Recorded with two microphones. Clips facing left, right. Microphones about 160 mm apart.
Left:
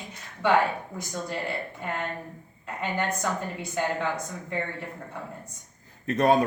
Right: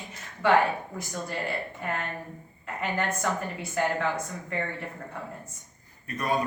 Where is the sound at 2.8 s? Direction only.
15° left (ahead or behind).